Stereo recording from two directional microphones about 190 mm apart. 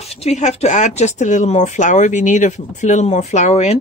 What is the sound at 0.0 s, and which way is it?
Speech, 35° left (ahead or behind).